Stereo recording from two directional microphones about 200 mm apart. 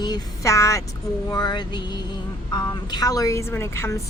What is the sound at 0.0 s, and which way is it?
A woman's voice, 15° left (ahead or behind).